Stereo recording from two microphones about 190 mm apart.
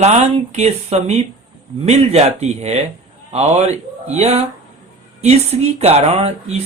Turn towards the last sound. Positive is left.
turn(degrees=-35)  # may be behind; listen again after turning